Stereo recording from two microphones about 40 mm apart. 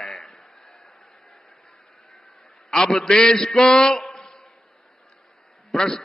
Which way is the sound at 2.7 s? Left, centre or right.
Centre.